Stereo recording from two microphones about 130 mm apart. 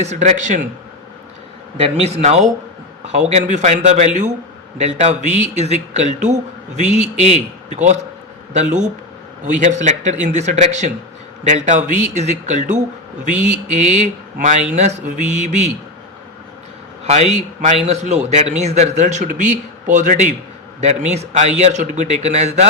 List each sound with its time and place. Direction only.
0.0 s speech: 60° right (ahead or behind); by 0.7 s 80° right
2.0 s speech: 55° right (ahead or behind)
8.5 s speech: 65° right (ahead or behind); by 14.6 s 85° right
14.8 s speech: 65° right (ahead or behind)
17.1 s speech: 60° right (ahead or behind)
18.9 s speech: 70° right (ahead or behind)
20.8 s speech: 60° right (ahead or behind)